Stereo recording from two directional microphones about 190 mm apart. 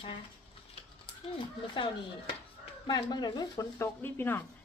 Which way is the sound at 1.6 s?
25° left (ahead or behind).